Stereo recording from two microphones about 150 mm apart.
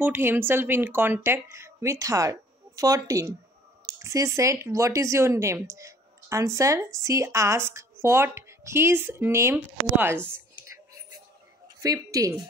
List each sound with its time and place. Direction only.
0.0 s speech: 15° right (ahead or behind)
11.8 s speech: 25° right (ahead or behind)